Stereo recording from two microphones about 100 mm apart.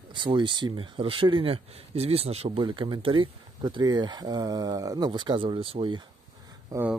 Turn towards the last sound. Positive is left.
turn(degrees=-35)  # may be behind; listen again after turning